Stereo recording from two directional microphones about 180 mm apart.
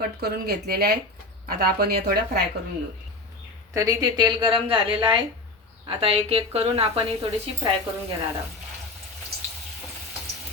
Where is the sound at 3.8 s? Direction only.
20° right (ahead or behind).